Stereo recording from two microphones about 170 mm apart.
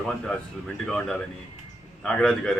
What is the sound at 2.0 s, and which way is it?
Speech, 5° left (ahead or behind).